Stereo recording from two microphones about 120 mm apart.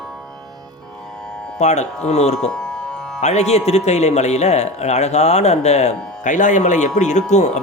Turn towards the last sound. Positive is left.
turn(degrees=75)  # may be behind; listen again after turning